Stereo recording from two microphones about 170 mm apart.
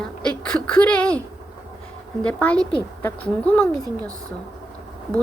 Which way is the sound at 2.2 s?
5° left (ahead or behind).